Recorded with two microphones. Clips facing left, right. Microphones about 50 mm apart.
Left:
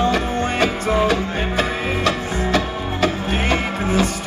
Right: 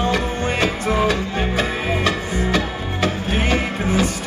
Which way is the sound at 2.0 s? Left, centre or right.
Centre.